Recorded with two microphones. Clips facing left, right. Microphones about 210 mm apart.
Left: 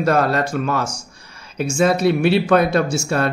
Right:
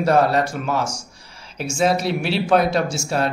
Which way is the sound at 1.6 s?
55° left (ahead or behind).